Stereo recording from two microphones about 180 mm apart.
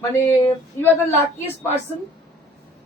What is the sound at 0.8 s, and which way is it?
Speech, 10° left (ahead or behind).